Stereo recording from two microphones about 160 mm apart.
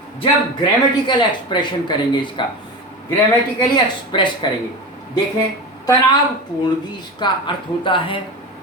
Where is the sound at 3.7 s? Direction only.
30° left (ahead or behind).